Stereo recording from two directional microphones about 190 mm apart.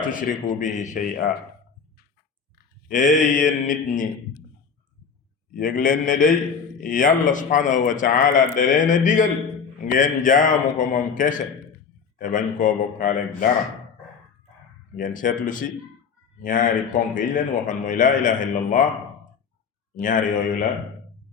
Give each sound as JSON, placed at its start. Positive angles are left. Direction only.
{"t": 0.0, "sound": "a man's voice", "side_deg": 45}
{"t": 2.9, "sound": "a man's voice", "side_deg": 40}
{"t": 5.5, "sound": "a man's voice", "side_deg": 45}
{"t": 8.5, "sound": "a sound", "side_deg": 45}
{"t": 9.8, "sound": "a man's voice", "side_deg": 45}
{"t": 14.9, "sound": "a man's voice", "side_deg": 45}